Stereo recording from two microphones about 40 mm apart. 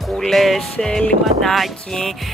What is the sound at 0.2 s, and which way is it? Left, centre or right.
Speech, centre.